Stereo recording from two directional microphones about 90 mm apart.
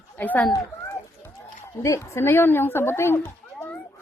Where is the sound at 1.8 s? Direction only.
35° left (ahead or behind).